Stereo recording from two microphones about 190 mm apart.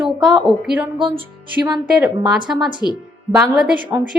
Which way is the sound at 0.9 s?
25° right (ahead or behind).